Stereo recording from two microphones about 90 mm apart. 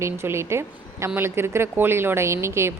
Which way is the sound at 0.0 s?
30° right (ahead or behind).